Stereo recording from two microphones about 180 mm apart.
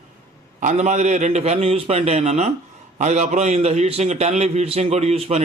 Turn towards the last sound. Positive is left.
turn(degrees=-35)  # may be behind; listen again after turning